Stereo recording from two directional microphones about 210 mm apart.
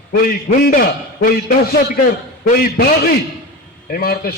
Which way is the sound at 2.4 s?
45° left (ahead or behind).